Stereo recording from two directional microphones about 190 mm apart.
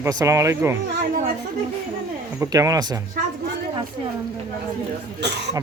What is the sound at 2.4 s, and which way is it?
Speech, 15° right (ahead or behind).